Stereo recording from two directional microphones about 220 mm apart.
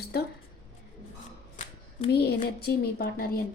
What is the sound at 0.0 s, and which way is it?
Speech, 45° left (ahead or behind).